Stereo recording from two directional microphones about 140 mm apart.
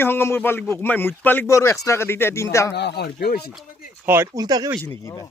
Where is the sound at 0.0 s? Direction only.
15° left (ahead or behind).